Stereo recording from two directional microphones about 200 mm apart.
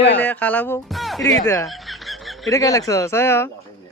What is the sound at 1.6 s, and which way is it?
Snicker, centre (ahead or behind).